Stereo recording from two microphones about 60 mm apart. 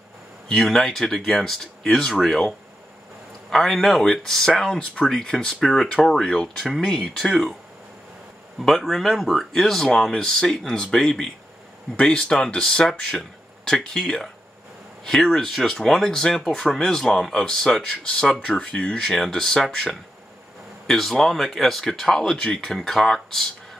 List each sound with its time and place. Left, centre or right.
0.5 s speech: centre
6.6 s speech: centre
8.5 s speech: centre
18.9 s speech: centre